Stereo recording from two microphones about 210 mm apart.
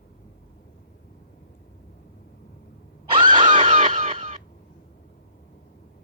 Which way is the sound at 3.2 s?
25° right (ahead or behind).